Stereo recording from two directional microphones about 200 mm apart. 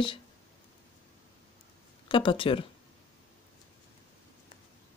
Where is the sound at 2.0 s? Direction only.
25° left (ahead or behind).